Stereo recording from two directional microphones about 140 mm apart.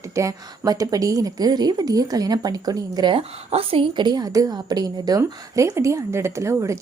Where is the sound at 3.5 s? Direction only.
40° right (ahead or behind).